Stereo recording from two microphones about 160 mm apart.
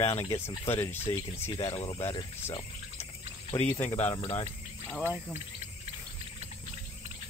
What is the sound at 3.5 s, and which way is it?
Speech, 15° left (ahead or behind).